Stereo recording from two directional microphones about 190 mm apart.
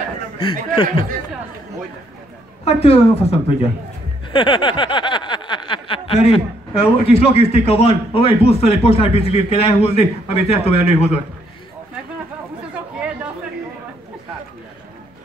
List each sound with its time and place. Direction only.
0.4 s a man's voice: 25° left (ahead or behind)
2.6 s snicker: 35° left (ahead or behind)